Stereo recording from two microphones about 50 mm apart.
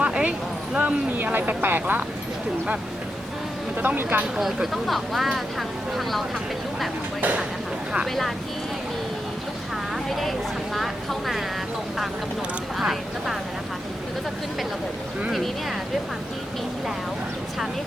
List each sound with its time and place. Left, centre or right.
0.0 s a sound: right
1.1 s speech: right
3.8 s speech: right
4.4 s speech: centre
10.1 s speech: centre
12.8 s speech: centre